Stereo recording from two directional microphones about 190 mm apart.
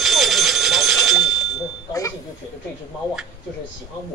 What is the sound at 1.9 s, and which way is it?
Bicycle bell, 15° left (ahead or behind).